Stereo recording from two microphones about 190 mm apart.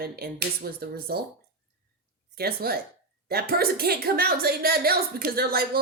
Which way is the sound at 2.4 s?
55° right (ahead or behind).